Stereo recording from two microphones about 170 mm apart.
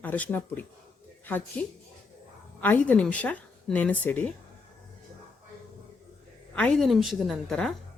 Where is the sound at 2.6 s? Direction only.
10° left (ahead or behind).